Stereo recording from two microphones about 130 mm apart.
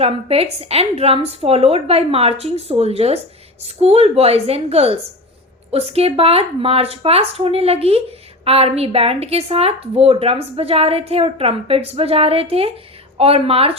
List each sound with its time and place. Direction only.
0.0 s a woman's voice: 50° right (ahead or behind)